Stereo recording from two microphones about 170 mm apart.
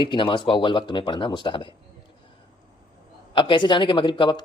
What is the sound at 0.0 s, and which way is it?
Speech, 30° left (ahead or behind).